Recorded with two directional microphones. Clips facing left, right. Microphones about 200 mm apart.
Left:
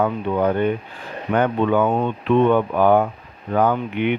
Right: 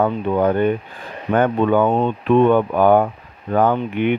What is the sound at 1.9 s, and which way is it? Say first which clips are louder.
Speech: right 2 dB; 40° right (ahead or behind).